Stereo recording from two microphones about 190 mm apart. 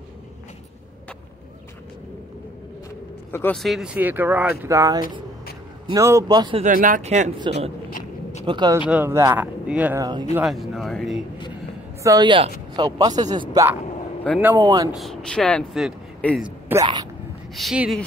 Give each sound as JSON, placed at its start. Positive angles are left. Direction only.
{"t": 3.3, "sound": "speech", "side_deg": 10}
{"t": 6.6, "sound": "speech", "side_deg": -45}
{"t": 7.5, "sound": "speech", "side_deg": -25}
{"t": 7.9, "sound": "a sound", "side_deg": 40}
{"t": 8.5, "sound": "speech", "side_deg": -25}
{"t": 8.7, "sound": "speech", "side_deg": -10}
{"t": 12.0, "sound": "speech", "side_deg": -20}
{"t": 14.3, "sound": "speech", "side_deg": 5}
{"t": 14.6, "sound": "speech", "side_deg": -20}
{"t": 14.9, "sound": "speech", "side_deg": 0}
{"t": 16.4, "sound": "speech", "side_deg": -10}
{"t": 16.8, "sound": "speech", "side_deg": -20}
{"t": 17.6, "sound": "speech", "side_deg": 0}